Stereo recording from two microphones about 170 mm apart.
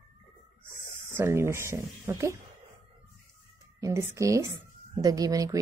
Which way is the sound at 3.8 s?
20° right (ahead or behind).